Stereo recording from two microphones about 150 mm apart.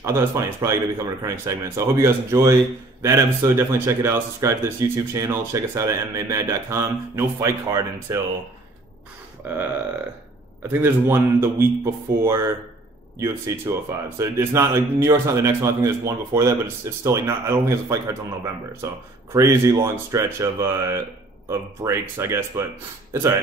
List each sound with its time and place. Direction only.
0.0 s speech: 20° right (ahead or behind)
9.4 s speech: 10° right (ahead or behind)
10.7 s speech: 15° right (ahead or behind)